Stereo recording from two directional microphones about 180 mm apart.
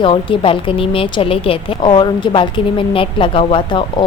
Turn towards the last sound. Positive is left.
turn(degrees=25)  # may be behind; listen again after turning